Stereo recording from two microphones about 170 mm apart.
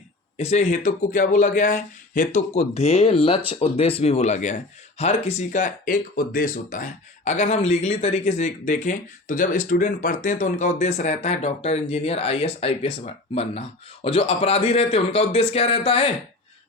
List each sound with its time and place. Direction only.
0.3 s speech: 40° left (ahead or behind)